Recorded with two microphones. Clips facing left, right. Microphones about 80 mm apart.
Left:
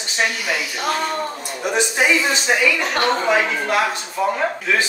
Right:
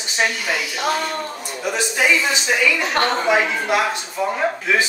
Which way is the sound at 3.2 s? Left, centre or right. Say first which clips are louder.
Even; centre.